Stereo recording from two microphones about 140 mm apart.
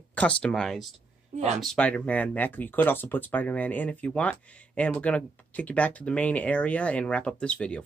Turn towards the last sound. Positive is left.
turn(degrees=5)  # may be behind; listen again after turning